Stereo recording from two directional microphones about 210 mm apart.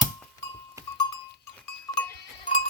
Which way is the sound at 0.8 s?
15° right (ahead or behind).